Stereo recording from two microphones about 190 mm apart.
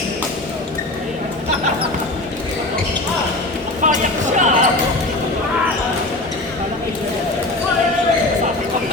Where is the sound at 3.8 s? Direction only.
40° right (ahead or behind).